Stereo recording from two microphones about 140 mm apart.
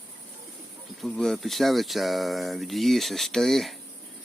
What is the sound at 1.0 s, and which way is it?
Speech, 5° left (ahead or behind).